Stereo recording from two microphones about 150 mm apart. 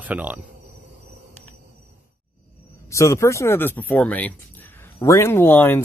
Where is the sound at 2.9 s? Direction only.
20° left (ahead or behind).